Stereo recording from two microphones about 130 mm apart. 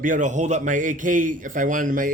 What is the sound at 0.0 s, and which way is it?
A man's voice, 80° right.